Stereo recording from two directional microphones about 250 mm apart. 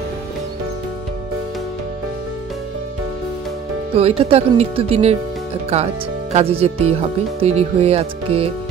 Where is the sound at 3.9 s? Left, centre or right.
Right.